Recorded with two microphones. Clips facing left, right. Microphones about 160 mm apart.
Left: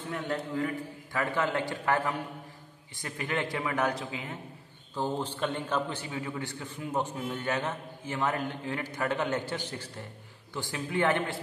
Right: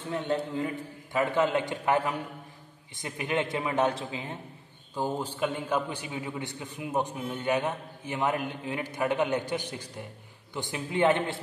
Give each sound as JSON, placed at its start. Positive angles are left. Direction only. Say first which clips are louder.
{"t": 0.1, "sound": "a man's voice", "louder": "right 3 dB", "side_deg": -20}
{"t": 4.9, "sound": "a man's voice", "louder": "right 1 dB", "side_deg": -10}